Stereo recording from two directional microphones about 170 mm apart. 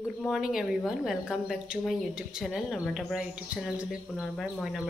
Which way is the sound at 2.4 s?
Centre (ahead or behind).